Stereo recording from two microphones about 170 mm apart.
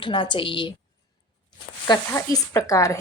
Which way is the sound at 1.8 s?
20° left (ahead or behind).